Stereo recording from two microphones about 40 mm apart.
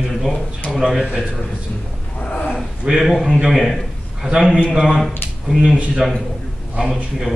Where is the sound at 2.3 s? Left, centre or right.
Left.